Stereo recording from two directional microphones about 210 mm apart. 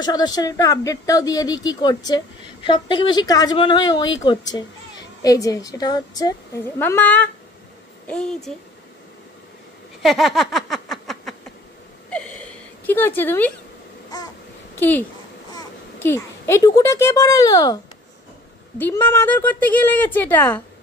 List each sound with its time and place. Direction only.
0.0 s speech: 20° left (ahead or behind)
10.0 s a sound: centre (ahead or behind)
14.1 s babbling: 20° left (ahead or behind)
14.8 s a child's voice: 10° left (ahead or behind)
18.8 s speech: 10° left (ahead or behind)